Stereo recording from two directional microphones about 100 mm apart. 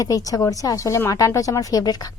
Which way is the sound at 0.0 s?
35° left (ahead or behind).